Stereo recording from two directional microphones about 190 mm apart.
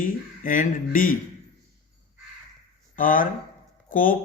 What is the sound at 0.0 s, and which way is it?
Speech, 45° left (ahead or behind).